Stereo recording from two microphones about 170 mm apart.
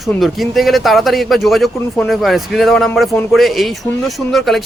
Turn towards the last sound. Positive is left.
turn(degrees=0)  # may be behind; listen again after turning